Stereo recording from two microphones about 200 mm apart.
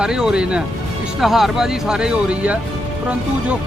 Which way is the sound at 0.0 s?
5° right (ahead or behind).